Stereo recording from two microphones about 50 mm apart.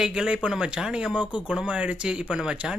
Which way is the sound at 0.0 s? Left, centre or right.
Centre.